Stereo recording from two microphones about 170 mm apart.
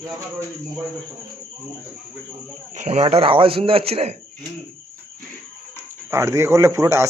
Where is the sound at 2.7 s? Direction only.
40° right (ahead or behind).